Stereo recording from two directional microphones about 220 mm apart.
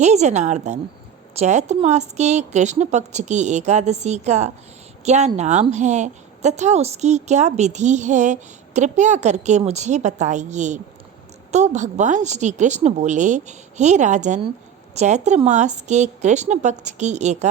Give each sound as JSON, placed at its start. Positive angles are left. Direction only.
{"t": 0.0, "sound": "a woman's voice", "side_deg": -30}